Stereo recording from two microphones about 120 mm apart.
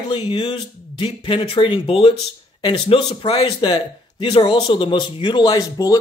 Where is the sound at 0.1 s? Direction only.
45° left (ahead or behind).